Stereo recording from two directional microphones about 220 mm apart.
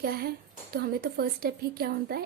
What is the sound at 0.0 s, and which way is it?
A woman's voice, 45° right (ahead or behind).